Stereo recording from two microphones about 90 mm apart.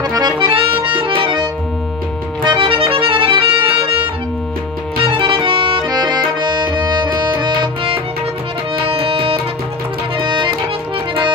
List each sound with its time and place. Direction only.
0.0 s accordion: 50° right (ahead or behind)
0.4 s accordion: 85° right
4.9 s music: 80° right
8.8 s music: 90° right
10.1 s music: 65° right (ahead or behind)